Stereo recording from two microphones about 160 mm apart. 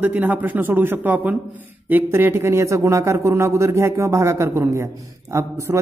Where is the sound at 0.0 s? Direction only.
10° right (ahead or behind).